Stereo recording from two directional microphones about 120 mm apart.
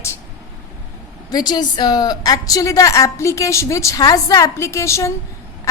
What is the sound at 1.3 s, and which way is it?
A woman's voice, 35° left (ahead or behind).